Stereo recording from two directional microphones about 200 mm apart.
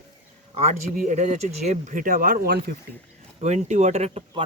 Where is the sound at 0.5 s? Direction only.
35° right (ahead or behind).